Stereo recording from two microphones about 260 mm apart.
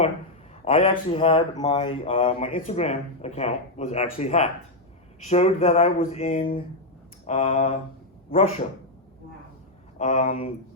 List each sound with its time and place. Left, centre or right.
0.6 s speech: left
10.0 s speech: left